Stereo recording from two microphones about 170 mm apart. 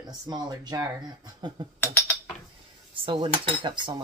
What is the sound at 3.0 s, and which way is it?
Speech, 30° right (ahead or behind).